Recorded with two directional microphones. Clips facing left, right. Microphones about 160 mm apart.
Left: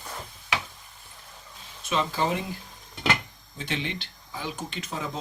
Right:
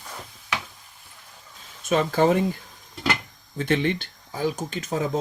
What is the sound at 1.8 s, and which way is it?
Speech, 50° right (ahead or behind).